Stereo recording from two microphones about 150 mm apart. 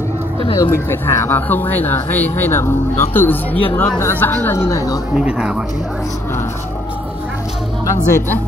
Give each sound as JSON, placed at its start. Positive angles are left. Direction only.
{"t": 0.6, "sound": "speech", "side_deg": 15}
{"t": 5.1, "sound": "speech", "side_deg": -5}
{"t": 7.8, "sound": "speech", "side_deg": 20}